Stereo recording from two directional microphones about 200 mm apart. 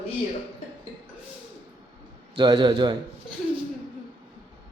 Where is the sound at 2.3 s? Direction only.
25° right (ahead or behind).